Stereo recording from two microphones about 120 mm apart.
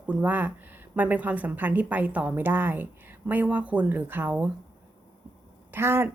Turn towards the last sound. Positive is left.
turn(degrees=-20)  # may be behind; listen again after turning